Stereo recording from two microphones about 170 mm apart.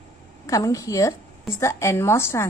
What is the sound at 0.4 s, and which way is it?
A woman's voice, 20° left (ahead or behind).